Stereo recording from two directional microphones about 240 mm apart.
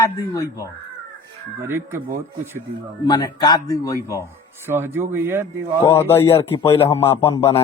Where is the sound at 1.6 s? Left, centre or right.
Centre.